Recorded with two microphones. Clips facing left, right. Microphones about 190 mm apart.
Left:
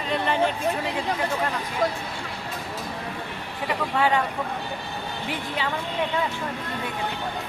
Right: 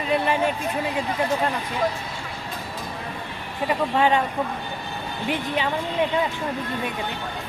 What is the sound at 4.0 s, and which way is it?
Speech, 20° right (ahead or behind).